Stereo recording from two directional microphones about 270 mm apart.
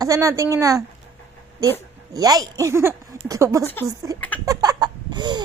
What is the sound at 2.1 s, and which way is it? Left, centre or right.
Speech, centre.